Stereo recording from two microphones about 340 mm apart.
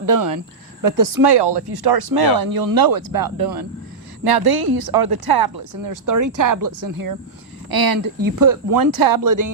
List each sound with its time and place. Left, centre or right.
0.0 s speech: right
5.7 s speech: right
7.7 s speech: right